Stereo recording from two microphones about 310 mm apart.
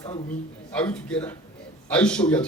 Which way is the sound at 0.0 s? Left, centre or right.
Centre.